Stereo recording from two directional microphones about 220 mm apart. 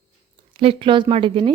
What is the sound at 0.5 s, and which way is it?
A woman's voice, 25° right (ahead or behind).